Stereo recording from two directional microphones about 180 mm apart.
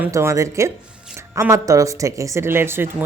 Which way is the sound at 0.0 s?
15° right (ahead or behind).